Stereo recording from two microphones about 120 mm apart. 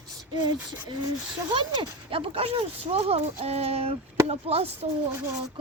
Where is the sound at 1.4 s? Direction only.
40° right (ahead or behind); by 4.9 s 55° right (ahead or behind).